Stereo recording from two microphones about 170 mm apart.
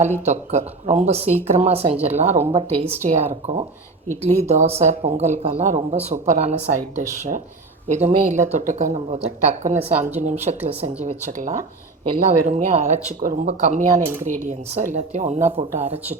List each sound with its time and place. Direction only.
0.3 s speech: 40° right (ahead or behind)
11.3 s speech: 50° right (ahead or behind)
14.0 s speech: 15° right (ahead or behind)
14.3 s speech: 45° right (ahead or behind)